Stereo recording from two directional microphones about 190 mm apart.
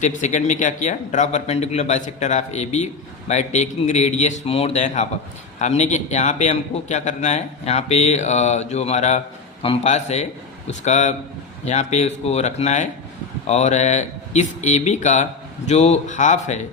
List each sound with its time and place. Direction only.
0.0 s a man's voice: 40° left (ahead or behind)